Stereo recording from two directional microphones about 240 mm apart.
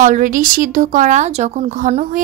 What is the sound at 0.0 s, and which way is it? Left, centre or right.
Speech, right.